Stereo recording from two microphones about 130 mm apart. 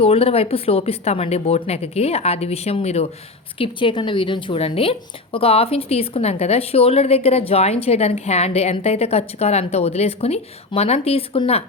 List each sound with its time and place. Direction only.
0.0 s speech: 50° left (ahead or behind)
3.6 s speech: 40° left (ahead or behind)